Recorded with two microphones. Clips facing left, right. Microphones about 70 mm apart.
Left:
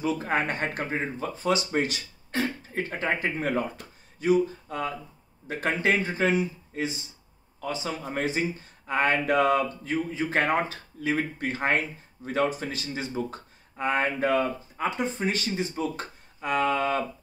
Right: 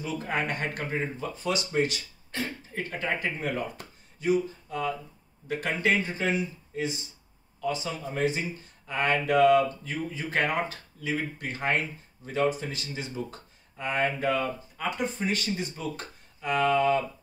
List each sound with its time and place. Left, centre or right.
0.0 s speech: left
5.5 s speech: left
6.1 s speech: left
8.0 s a sound: left
8.3 s speech: left
11.0 s speech: left
16.3 s a sound: left